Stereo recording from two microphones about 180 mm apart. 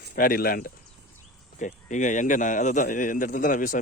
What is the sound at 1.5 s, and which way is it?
Speech, 45° left (ahead or behind).